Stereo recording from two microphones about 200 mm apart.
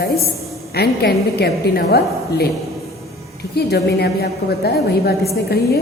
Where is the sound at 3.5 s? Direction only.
55° left (ahead or behind).